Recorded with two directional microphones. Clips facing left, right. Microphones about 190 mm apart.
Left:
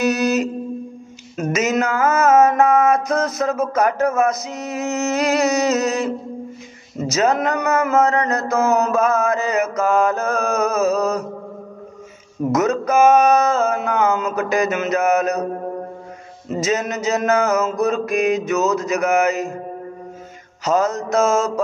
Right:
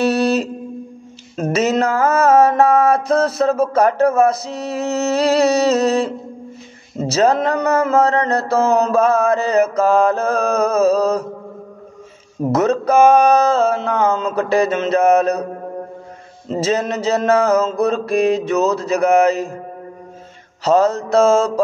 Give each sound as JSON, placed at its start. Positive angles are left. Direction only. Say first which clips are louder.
{"t": 0.0, "sound": "music", "louder": "right 2 dB", "side_deg": -30}
{"t": 1.3, "sound": "mantra", "louder": "right 3 dB", "side_deg": -30}
{"t": 12.4, "sound": "mantra", "louder": "right 2 dB", "side_deg": -30}
{"t": 16.4, "sound": "mantra", "louder": "right 2 dB", "side_deg": -30}
{"t": 20.6, "sound": "mantra", "louder": "right 4 dB", "side_deg": -30}